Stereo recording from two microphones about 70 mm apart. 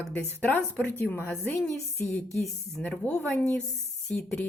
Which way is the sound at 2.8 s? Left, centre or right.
Left.